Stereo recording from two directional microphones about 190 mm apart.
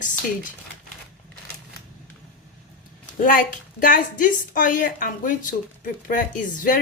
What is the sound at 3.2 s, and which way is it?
A woman's voice, 45° left (ahead or behind).